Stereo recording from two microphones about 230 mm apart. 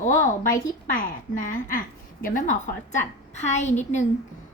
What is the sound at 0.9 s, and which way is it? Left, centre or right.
A woman's voice, left.